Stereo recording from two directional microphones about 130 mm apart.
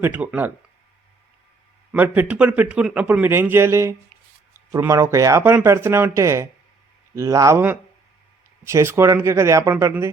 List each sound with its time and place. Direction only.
0.0 s speech: 10° right (ahead or behind)
1.9 s speech: 10° right (ahead or behind)
8.6 s speech: 20° right (ahead or behind)